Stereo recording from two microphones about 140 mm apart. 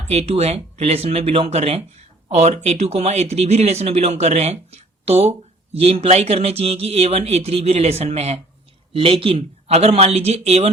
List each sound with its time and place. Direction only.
0.1 s speech: 50° right (ahead or behind)